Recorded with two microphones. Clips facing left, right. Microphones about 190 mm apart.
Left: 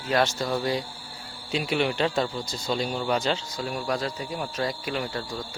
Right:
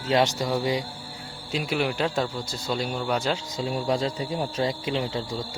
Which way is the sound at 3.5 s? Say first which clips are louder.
Right 3 dB; 25° right (ahead or behind).